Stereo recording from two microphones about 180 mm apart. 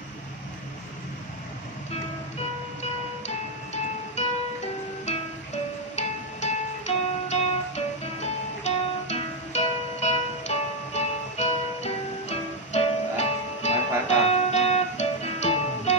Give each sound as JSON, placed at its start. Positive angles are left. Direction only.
{"t": 2.3, "sound": "music", "side_deg": 40}